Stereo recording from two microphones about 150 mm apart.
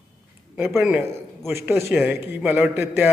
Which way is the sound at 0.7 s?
5° right (ahead or behind).